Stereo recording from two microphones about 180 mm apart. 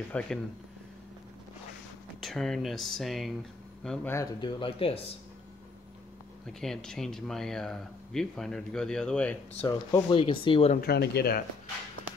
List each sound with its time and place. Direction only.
0.1 s speech: 5° left (ahead or behind)
2.1 s speech: centre (ahead or behind)
4.1 s speech: 20° left (ahead or behind)
6.4 s speech: 5° left (ahead or behind)
9.8 s speech: 25° left (ahead or behind)
10.8 s speech: 65° left (ahead or behind)